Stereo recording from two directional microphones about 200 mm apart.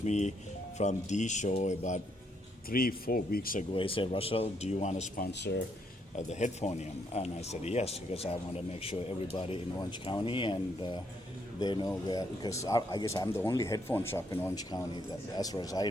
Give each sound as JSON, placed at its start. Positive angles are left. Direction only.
{"t": 0.0, "sound": "speech", "side_deg": 35}
{"t": 2.6, "sound": "speech", "side_deg": 45}
{"t": 3.8, "sound": "speech", "side_deg": 25}
{"t": 5.2, "sound": "speech", "side_deg": 55}
{"t": 6.1, "sound": "speech", "side_deg": 35}